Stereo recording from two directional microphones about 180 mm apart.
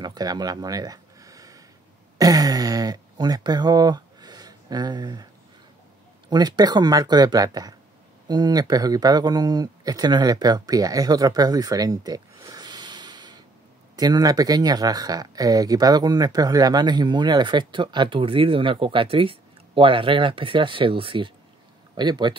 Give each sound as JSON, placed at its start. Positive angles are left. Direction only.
{"t": 0.0, "sound": "a sound", "side_deg": -20}
{"t": 2.1, "sound": "speech", "side_deg": -20}
{"t": 6.2, "sound": "speech", "side_deg": -25}